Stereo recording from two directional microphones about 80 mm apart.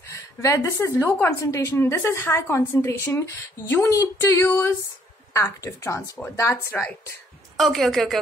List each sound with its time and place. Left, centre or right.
0.1 s speech: left
1.7 s speech: left
7.5 s a woman's voice: centre